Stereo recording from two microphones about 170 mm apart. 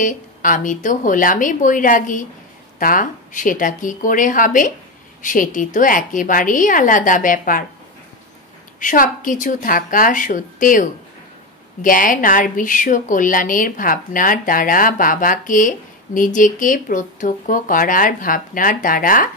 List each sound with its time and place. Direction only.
0.0 s a woman's voice: 50° left (ahead or behind)
8.7 s a woman's voice: 50° left (ahead or behind)